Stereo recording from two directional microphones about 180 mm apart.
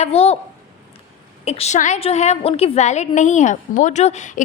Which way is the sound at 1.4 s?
35° left (ahead or behind).